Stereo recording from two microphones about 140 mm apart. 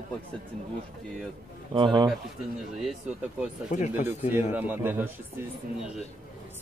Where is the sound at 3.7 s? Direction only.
60° left (ahead or behind).